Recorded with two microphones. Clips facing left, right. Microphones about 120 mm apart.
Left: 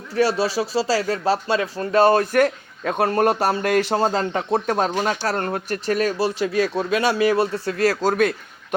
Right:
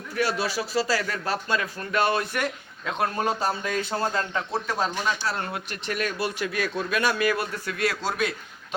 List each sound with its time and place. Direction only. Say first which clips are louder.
0.2 s speech: left 7 dB; 30° left (ahead or behind)
3.0 s a man's voice: left 7 dB; 65° left (ahead or behind)
4.9 s speech: left 6 dB; 50° left (ahead or behind)